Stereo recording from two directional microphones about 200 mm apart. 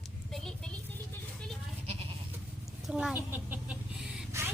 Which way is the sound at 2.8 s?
5° right (ahead or behind).